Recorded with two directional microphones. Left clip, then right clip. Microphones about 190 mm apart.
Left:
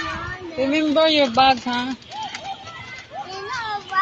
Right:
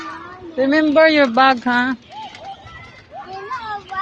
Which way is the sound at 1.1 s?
90° right.